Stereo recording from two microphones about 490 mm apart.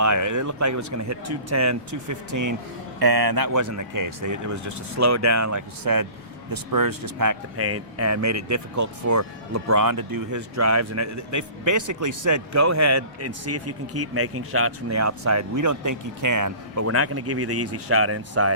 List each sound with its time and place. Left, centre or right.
0.0 s speech: right
3.0 s speech: right